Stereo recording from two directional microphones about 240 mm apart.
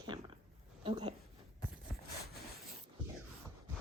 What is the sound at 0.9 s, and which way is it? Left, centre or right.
Speech, right.